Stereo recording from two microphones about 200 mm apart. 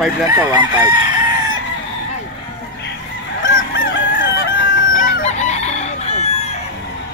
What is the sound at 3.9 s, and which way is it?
Chicken, 70° left (ahead or behind).